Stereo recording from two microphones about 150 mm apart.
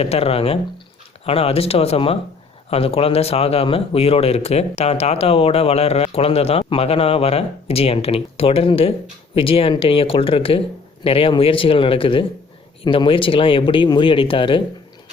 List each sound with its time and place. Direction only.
0.0 s speech: 40° left (ahead or behind)